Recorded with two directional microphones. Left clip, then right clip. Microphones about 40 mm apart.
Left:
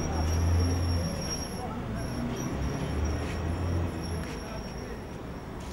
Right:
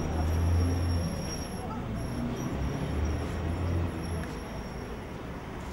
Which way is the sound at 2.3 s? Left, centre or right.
Left.